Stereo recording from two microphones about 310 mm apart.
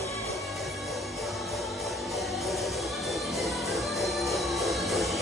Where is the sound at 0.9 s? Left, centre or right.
Centre.